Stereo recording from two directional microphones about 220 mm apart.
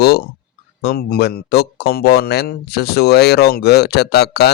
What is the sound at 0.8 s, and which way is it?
Speech, 45° left (ahead or behind).